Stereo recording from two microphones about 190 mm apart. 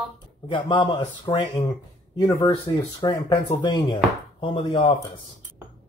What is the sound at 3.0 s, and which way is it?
Speech, 25° left (ahead or behind).